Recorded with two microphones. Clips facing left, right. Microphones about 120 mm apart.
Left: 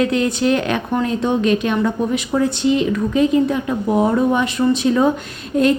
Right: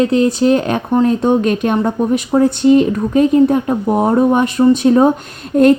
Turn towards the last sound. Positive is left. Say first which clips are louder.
# right 6 dB
turn(degrees=-50)  # may be behind; listen again after turning